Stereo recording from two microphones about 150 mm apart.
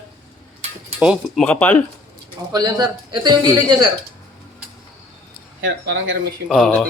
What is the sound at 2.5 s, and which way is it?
Speech, 25° right (ahead or behind).